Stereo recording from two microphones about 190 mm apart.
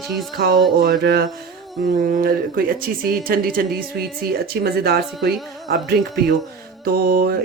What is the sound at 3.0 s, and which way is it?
Speech, 50° right (ahead or behind).